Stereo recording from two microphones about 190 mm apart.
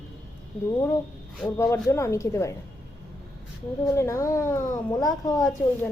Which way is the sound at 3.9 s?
15° left (ahead or behind).